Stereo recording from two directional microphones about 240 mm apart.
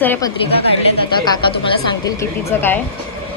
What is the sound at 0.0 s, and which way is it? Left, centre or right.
A woman's voice, centre.